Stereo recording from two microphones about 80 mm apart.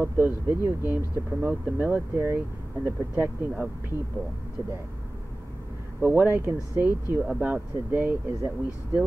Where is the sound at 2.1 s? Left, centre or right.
Right.